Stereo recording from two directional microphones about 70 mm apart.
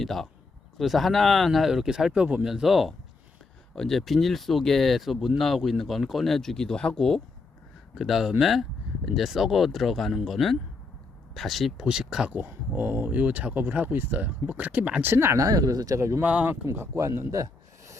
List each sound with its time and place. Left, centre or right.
0.0 s speech: centre
7.9 s speech: centre
12.3 s speech: right
15.0 s speech: right
15.4 s speech: right
16.0 s speech: right
16.2 s speech: centre
16.6 s speech: right
17.2 s a sound: right